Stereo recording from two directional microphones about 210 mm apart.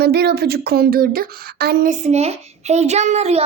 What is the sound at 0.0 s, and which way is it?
Speech, 50° right (ahead or behind).